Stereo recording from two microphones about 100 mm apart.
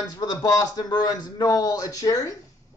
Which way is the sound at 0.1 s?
45° left (ahead or behind).